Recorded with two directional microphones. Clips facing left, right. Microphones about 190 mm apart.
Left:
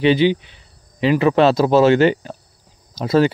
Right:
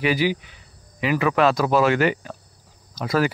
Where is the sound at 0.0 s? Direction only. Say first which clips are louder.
Left 7 dB; 25° left (ahead or behind).